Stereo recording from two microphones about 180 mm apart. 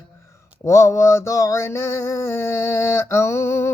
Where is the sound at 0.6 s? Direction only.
15° left (ahead or behind).